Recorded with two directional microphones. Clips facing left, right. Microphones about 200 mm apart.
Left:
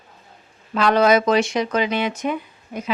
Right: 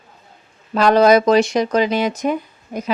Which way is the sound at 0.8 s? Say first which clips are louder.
Right 4 dB; 40° right (ahead or behind).